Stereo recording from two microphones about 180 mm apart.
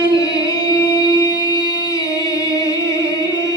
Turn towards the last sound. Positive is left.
turn(degrees=20)  # may be behind; listen again after turning